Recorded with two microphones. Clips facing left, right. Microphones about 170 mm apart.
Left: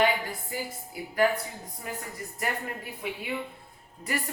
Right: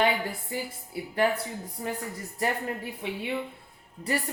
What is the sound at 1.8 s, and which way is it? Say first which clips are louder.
A woman's voice: right 3 dB; 40° right (ahead or behind).